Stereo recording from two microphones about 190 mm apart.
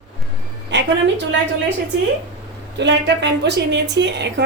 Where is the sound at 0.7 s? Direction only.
70° right (ahead or behind).